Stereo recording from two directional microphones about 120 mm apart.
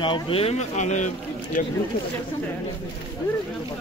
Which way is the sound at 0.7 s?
85° left.